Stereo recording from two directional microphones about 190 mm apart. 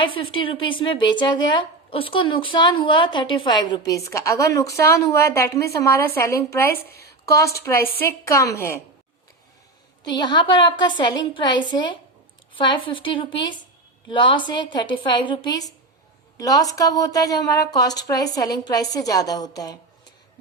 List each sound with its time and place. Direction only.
0.0 s a woman's voice: 25° left (ahead or behind)
6.7 s a woman's voice: 55° left (ahead or behind)
7.3 s a woman's voice: 15° left (ahead or behind)
10.0 s a woman's voice: 20° left (ahead or behind)